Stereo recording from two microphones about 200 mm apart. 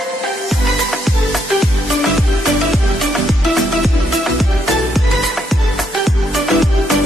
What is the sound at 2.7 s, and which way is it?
Music, centre (ahead or behind).